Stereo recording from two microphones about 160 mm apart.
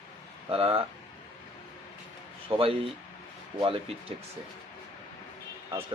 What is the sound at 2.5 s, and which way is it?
Speech, 30° right (ahead or behind).